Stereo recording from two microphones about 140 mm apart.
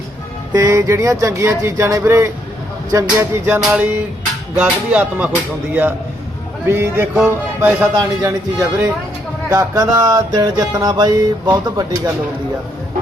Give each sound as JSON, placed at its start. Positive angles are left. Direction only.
{"t": 0.5, "sound": "mantra", "side_deg": -25}
{"t": 3.6, "sound": "music", "side_deg": -5}
{"t": 6.7, "sound": "music", "side_deg": -15}
{"t": 8.2, "sound": "mantra", "side_deg": -25}